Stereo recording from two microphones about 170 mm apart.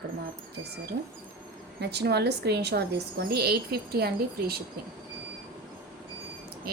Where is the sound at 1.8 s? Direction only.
75° right (ahead or behind).